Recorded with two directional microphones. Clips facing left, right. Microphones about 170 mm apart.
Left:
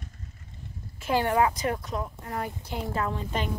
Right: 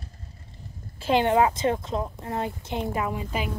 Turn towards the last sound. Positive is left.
turn(degrees=-10)  # may be behind; listen again after turning